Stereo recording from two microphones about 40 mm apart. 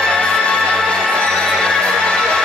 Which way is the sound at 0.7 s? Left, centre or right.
Centre.